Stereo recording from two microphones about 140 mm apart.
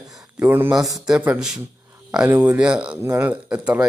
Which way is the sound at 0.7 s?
Centre (ahead or behind).